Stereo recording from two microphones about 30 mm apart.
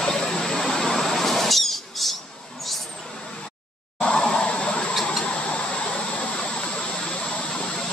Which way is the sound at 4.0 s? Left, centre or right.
Left.